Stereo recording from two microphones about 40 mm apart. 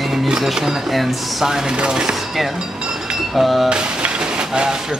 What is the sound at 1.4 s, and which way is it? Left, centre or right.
Speech, centre.